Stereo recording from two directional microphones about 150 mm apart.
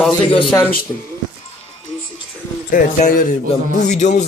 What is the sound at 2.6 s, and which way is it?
Speech, 65° left (ahead or behind).